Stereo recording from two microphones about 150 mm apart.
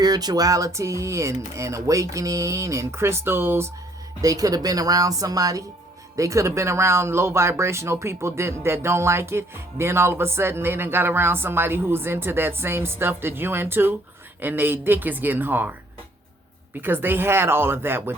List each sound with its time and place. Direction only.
0.0 s speech: 25° right (ahead or behind)
16.8 s speech: 15° right (ahead or behind)